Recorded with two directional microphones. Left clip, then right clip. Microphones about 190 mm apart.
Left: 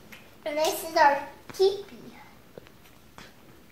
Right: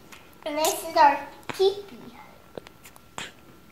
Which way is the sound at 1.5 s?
35° right (ahead or behind).